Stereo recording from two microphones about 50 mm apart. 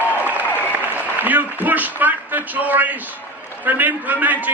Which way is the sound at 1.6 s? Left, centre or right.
Right.